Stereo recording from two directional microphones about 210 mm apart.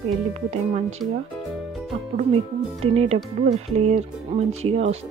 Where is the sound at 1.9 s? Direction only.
30° right (ahead or behind).